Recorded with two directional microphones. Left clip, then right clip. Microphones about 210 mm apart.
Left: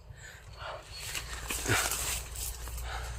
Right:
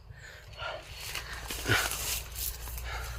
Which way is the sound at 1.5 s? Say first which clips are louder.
Right 1 dB; 5° right (ahead or behind).